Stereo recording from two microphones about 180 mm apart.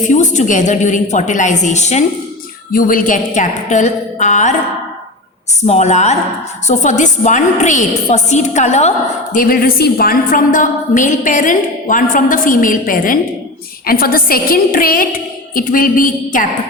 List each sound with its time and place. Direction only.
0.0 s a woman's voice: 45° left (ahead or behind)
5.6 s a woman's voice: 40° left (ahead or behind)
9.3 s a woman's voice: 50° left (ahead or behind)